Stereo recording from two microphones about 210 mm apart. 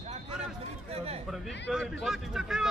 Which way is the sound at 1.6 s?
Centre (ahead or behind).